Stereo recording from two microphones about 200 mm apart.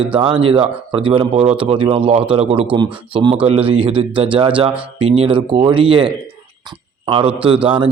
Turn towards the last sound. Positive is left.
turn(degrees=-25)  # may be behind; listen again after turning